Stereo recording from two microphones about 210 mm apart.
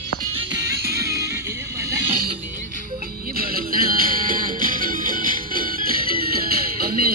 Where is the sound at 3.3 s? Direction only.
45° right (ahead or behind).